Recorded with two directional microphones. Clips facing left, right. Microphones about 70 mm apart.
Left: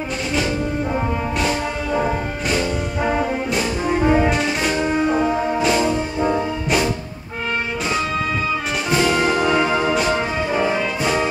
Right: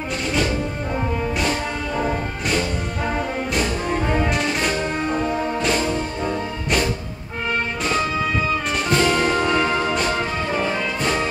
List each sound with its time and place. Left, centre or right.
0.9 s music: centre
3.1 s brass instrument: centre
4.3 s music: centre
8.9 s music: centre